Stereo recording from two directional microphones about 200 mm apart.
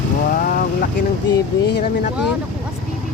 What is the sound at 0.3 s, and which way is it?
Vehicle, 45° left (ahead or behind).